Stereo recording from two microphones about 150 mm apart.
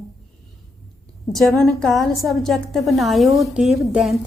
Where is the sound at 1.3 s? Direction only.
Centre (ahead or behind).